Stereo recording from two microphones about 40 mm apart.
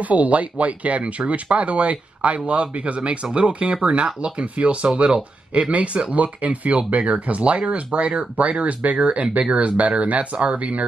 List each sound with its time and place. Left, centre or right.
0.0 s speech: right